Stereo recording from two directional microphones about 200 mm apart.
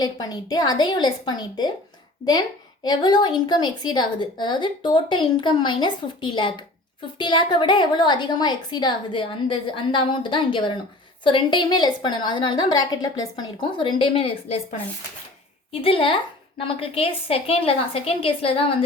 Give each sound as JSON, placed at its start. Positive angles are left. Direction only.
{"t": 0.0, "sound": "a woman's voice", "side_deg": 20}
{"t": 2.8, "sound": "a woman's voice", "side_deg": 20}